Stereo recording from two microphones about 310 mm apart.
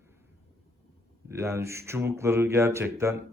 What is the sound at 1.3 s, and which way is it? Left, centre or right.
Speech, centre.